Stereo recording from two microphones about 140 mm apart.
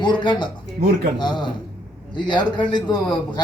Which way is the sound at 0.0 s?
35° left (ahead or behind).